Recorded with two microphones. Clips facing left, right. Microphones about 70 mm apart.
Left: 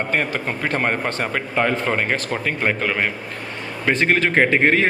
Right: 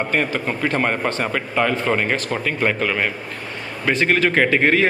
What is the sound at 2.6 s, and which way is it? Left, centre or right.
A man's voice, left.